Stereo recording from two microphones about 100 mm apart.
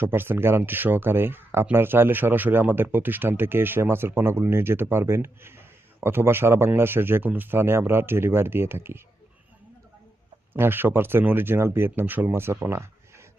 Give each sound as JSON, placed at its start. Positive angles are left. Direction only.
{"t": 0.0, "sound": "speech", "side_deg": -20}
{"t": 10.5, "sound": "speech", "side_deg": -20}